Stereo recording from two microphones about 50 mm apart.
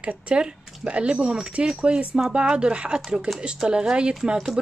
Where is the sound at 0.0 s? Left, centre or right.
Right.